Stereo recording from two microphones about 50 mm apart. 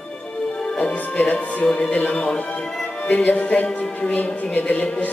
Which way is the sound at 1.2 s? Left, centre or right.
Left.